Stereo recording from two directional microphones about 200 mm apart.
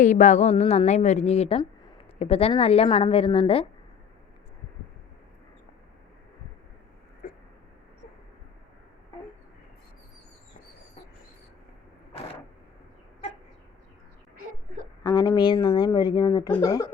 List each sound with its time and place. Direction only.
0.0 s a woman's voice: 40° left (ahead or behind)
7.2 s a sound: 45° left (ahead or behind)
15.0 s a woman's voice: 20° left (ahead or behind)